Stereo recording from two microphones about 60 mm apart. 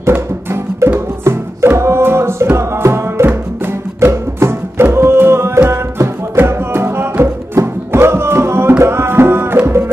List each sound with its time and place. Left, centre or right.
0.9 s music: right